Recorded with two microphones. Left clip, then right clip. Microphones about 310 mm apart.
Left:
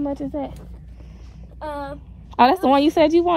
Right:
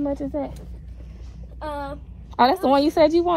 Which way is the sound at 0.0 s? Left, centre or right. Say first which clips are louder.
Even; left.